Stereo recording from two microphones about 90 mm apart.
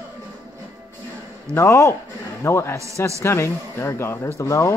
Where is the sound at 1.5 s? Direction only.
35° left (ahead or behind).